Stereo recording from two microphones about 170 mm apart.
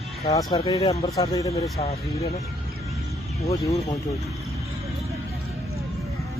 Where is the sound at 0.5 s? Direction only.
35° left (ahead or behind).